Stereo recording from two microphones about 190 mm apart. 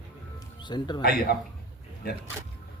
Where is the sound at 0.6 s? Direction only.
25° left (ahead or behind).